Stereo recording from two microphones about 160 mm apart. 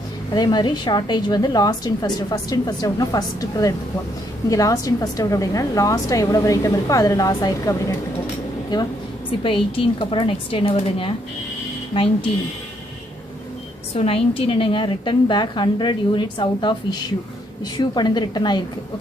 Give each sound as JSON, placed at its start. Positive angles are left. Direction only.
{"t": 0.3, "sound": "a woman's voice", "side_deg": 25}
{"t": 13.9, "sound": "a woman's voice", "side_deg": 35}